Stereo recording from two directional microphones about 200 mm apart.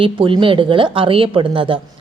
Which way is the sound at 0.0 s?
25° right (ahead or behind).